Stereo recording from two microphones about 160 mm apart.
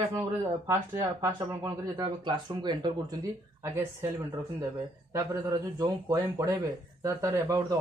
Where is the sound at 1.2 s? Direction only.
20° right (ahead or behind).